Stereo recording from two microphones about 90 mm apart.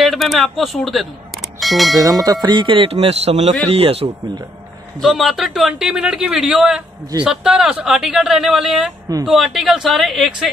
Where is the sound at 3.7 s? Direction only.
90° right.